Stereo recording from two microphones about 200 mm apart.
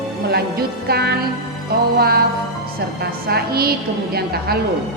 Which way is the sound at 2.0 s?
50° right (ahead or behind).